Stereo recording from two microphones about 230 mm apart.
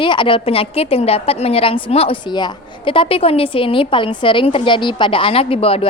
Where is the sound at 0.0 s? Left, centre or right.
Left.